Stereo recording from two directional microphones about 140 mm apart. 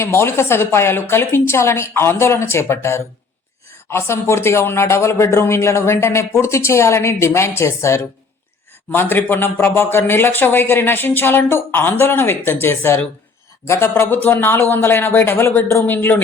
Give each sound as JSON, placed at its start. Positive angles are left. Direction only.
{"t": 0.0, "sound": "speech", "side_deg": 20}